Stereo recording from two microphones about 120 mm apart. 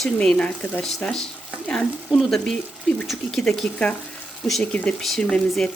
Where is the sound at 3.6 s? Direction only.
5° left (ahead or behind).